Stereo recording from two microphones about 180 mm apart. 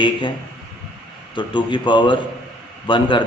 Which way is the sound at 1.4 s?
25° left (ahead or behind).